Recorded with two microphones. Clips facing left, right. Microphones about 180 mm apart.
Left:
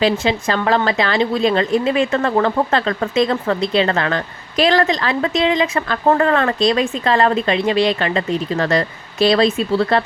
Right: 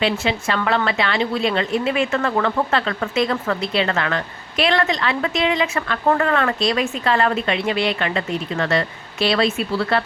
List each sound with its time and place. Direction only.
0.0 s a woman's voice: 35° left (ahead or behind)